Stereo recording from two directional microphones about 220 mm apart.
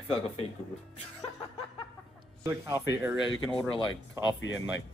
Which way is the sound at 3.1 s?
65° left (ahead or behind).